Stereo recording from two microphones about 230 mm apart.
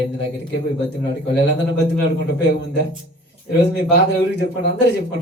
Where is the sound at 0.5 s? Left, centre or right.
Left.